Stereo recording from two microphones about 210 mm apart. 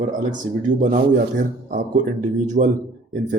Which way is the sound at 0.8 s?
40° right (ahead or behind).